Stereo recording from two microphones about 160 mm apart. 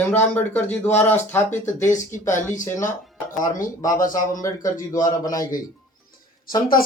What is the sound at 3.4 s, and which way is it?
Speech, 55° left (ahead or behind).